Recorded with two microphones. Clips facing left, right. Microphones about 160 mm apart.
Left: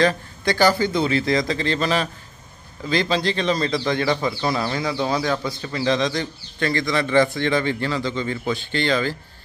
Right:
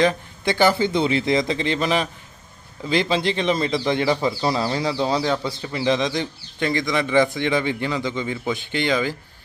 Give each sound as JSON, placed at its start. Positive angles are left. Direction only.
{"t": 0.0, "sound": "speech", "side_deg": -20}
{"t": 4.5, "sound": "a man's voice", "side_deg": -30}